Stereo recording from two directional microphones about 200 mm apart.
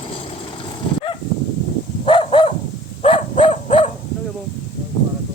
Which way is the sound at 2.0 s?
25° left (ahead or behind).